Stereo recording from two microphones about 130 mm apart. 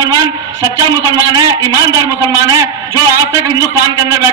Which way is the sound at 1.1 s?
30° right (ahead or behind).